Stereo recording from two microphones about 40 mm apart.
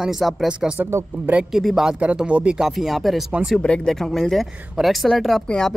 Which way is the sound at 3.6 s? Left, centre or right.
Left.